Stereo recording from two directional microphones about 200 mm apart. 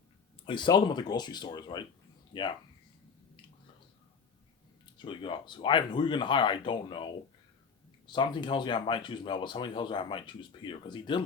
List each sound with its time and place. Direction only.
0.4 s speech: 25° left (ahead or behind)
4.9 s speech: 25° left (ahead or behind)